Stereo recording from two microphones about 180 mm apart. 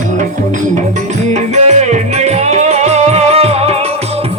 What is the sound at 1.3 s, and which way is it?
Music, 40° right (ahead or behind).